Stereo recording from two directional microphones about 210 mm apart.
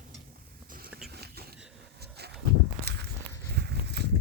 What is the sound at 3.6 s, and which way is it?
Walk, 50° right (ahead or behind).